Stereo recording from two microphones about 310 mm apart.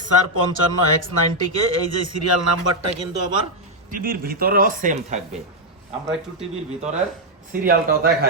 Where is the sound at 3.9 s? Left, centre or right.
Right.